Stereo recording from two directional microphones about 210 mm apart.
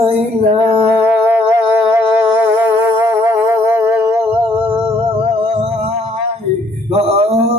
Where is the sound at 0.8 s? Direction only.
10° right (ahead or behind).